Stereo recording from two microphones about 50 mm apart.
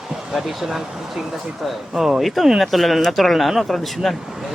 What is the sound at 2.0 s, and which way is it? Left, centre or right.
Speech, centre.